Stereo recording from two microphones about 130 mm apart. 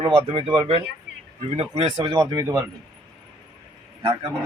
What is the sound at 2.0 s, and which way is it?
Speech, 30° right (ahead or behind).